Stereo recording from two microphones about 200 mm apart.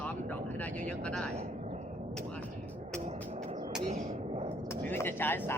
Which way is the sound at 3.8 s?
30° right (ahead or behind).